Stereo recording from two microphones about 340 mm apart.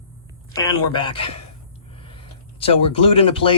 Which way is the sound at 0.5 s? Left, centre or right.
Centre.